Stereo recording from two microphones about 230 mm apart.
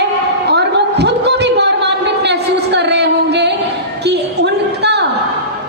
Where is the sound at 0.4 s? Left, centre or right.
Right.